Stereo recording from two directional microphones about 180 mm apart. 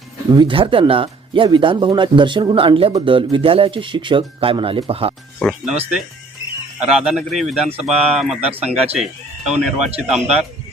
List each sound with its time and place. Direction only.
0.3 s speech: 25° right (ahead or behind)
5.4 s speech: centre (ahead or behind)
6.7 s speech: 5° right (ahead or behind)